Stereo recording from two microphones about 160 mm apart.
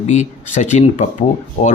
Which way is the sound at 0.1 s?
50° left (ahead or behind).